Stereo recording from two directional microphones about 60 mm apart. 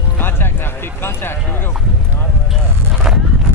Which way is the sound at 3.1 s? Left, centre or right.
Centre.